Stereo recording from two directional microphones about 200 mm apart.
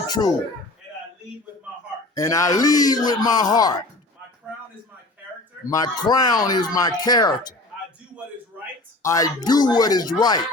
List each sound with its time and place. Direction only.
0.1 s speech: 20° left (ahead or behind)
2.1 s speech: 15° left (ahead or behind)
5.6 s speech: 20° left (ahead or behind)
9.0 s speech: 15° left (ahead or behind)